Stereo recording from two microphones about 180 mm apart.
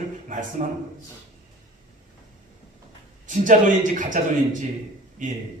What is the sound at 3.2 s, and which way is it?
Speech, 45° right (ahead or behind).